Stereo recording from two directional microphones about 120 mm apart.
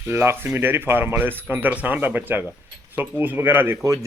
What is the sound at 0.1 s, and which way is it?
A man's voice, 20° right (ahead or behind).